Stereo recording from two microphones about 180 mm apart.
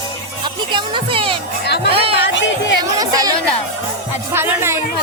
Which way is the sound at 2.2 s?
90° left.